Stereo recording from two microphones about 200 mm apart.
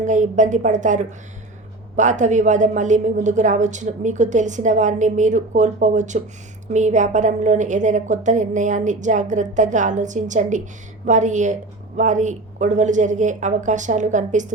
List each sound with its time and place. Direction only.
0.0 s a woman's voice: 40° right (ahead or behind)